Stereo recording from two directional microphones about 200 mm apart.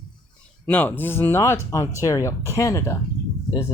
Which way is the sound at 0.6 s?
5° left (ahead or behind).